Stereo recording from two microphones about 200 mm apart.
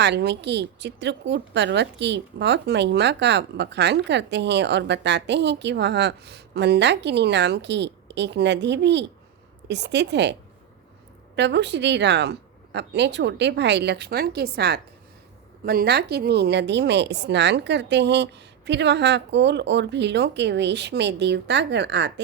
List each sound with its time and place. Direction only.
0.0 s a woman's voice: 60° right (ahead or behind)
11.3 s a woman's voice: 60° right (ahead or behind)